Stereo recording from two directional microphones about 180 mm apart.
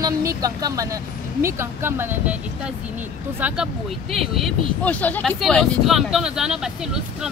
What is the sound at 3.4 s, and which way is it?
Speech, 5° right (ahead or behind).